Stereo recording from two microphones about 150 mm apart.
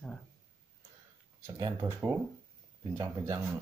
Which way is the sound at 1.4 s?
20° right (ahead or behind).